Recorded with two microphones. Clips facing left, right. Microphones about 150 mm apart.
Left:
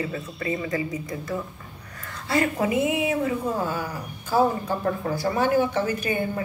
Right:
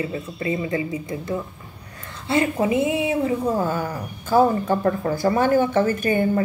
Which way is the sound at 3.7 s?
50° right (ahead or behind).